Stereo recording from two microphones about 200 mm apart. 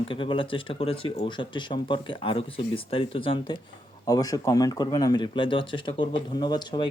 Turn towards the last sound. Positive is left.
turn(degrees=20)  # may be behind; listen again after turning